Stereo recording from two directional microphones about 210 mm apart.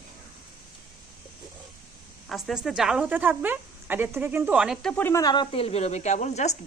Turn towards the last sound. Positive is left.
turn(degrees=35)  # may be behind; listen again after turning